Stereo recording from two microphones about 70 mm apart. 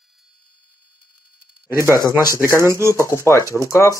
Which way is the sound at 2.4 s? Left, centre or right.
Right.